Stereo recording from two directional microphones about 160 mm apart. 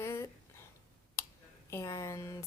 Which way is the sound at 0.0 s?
15° left (ahead or behind).